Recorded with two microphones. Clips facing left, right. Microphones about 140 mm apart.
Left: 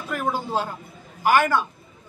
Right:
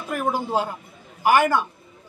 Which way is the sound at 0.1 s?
10° right (ahead or behind).